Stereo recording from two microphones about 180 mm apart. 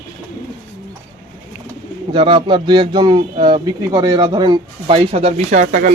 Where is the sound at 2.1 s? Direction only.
30° right (ahead or behind).